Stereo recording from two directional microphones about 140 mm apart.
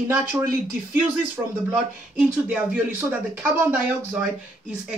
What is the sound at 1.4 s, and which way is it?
Speech, 10° right (ahead or behind).